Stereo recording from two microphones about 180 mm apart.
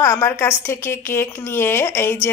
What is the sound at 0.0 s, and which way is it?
A woman's voice, 15° left (ahead or behind).